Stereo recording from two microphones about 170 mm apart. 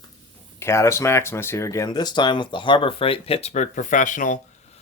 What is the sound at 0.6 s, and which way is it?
Speech, 15° left (ahead or behind).